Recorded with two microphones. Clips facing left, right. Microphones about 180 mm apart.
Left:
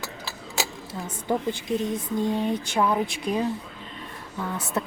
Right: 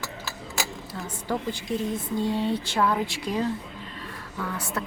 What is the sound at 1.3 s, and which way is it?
Speech, 20° left (ahead or behind).